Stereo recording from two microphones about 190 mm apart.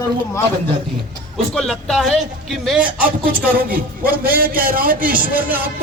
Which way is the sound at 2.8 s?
50° right (ahead or behind).